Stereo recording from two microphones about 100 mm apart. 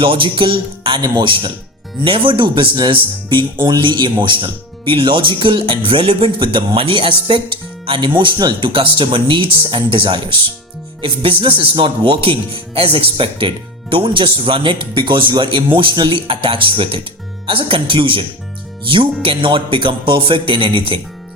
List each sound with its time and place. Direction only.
0.0 s speech: 60° right (ahead or behind)
19.2 s speech: 60° right (ahead or behind)